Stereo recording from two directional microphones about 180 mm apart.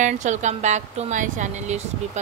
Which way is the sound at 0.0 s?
40° right (ahead or behind).